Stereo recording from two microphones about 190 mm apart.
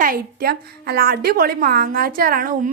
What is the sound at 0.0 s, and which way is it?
A woman's voice, 50° right (ahead or behind).